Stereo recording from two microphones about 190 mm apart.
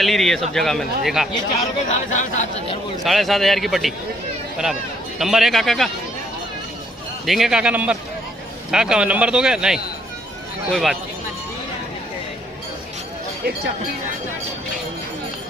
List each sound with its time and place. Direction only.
0.0 s speech: centre (ahead or behind)
1.9 s speech: 35° left (ahead or behind)
3.0 s speech: centre (ahead or behind)
5.2 s speech: centre (ahead or behind)
7.2 s speech: centre (ahead or behind)